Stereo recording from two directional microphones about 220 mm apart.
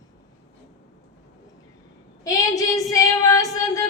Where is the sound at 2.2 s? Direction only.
15° left (ahead or behind).